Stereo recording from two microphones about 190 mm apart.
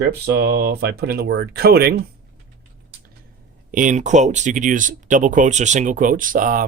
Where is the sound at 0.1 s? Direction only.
60° right (ahead or behind).